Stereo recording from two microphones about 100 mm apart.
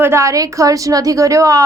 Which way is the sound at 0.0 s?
30° right (ahead or behind).